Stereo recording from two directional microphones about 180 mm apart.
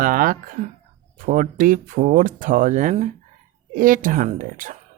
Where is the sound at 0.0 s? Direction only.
50° right (ahead or behind).